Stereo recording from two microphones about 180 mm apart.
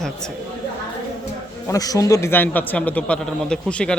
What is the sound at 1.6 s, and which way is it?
Speech, 20° left (ahead or behind).